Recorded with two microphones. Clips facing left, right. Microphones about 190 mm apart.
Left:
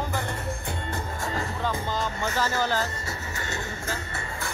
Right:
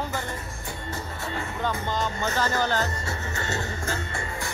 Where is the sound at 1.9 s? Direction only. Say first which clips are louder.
Right 1 dB; 5° left (ahead or behind).